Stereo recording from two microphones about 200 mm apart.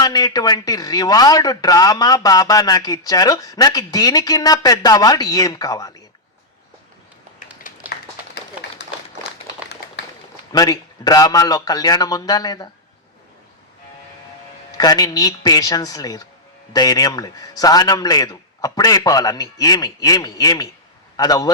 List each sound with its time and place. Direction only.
0.0 s a man's voice: 20° left (ahead or behind)
7.6 s a sound: 45° left (ahead or behind)
10.0 s run: 60° left (ahead or behind)
10.5 s a man's voice: 20° left (ahead or behind)
14.8 s a man's voice: 20° left (ahead or behind)